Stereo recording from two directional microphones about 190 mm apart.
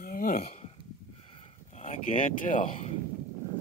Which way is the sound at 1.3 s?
30° left (ahead or behind).